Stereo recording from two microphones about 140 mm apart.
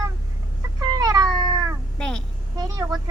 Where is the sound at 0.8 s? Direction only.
30° right (ahead or behind).